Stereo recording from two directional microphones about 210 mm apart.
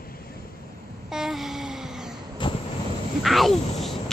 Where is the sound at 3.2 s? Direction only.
Centre (ahead or behind).